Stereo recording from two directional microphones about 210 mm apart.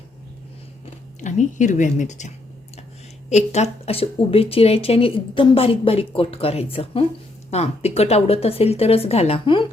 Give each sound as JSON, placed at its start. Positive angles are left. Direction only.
{"t": 1.2, "sound": "a woman's voice", "side_deg": 35}